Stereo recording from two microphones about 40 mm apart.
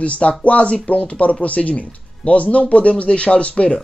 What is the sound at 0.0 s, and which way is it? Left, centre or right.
Speech, left.